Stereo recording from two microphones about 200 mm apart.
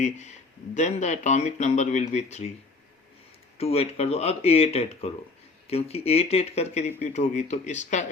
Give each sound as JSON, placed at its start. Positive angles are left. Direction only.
{"t": 0.0, "sound": "speech", "side_deg": 35}
{"t": 3.6, "sound": "speech", "side_deg": 30}